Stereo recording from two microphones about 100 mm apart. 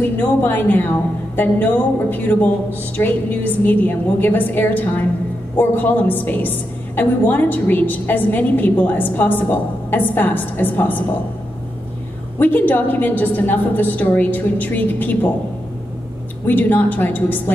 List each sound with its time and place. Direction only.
0.2 s a woman's voice: 20° left (ahead or behind)
12.4 s a woman's voice: 15° left (ahead or behind)
16.4 s a woman's voice: 20° left (ahead or behind)